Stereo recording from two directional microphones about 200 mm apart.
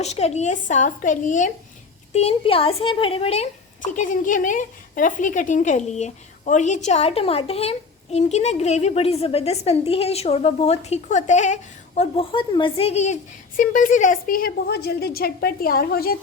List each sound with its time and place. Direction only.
0.0 s a woman's voice: 35° left (ahead or behind); by 16.1 s 50° left (ahead or behind)